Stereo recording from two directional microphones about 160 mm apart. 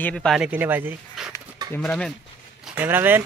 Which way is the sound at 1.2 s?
Centre (ahead or behind).